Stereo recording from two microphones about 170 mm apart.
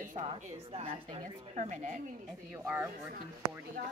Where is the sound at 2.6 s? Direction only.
15° right (ahead or behind).